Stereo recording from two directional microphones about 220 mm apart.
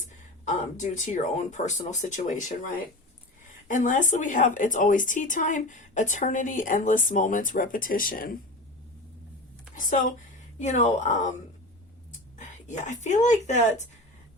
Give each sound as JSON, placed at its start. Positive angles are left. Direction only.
{"t": 0.4, "sound": "a woman's voice", "side_deg": 35}
{"t": 3.7, "sound": "a woman's voice", "side_deg": 35}
{"t": 9.7, "sound": "a woman's voice", "side_deg": 35}
{"t": 12.4, "sound": "whispering", "side_deg": 35}
{"t": 13.2, "sound": "a woman's voice", "side_deg": 35}